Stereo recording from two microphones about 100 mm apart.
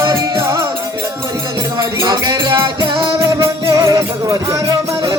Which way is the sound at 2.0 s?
45° right (ahead or behind).